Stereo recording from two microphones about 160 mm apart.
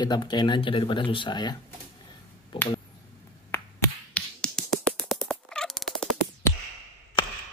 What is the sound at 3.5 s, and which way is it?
Finger snapping, 15° left (ahead or behind).